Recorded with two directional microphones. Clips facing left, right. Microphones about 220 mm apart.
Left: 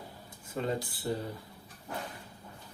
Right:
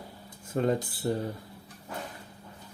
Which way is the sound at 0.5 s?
45° right (ahead or behind).